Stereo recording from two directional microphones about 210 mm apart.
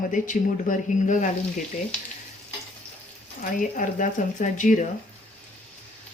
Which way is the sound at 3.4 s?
40° left (ahead or behind).